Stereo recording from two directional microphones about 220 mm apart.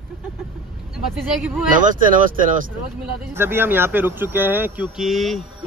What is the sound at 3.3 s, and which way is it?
Speech, 10° right (ahead or behind).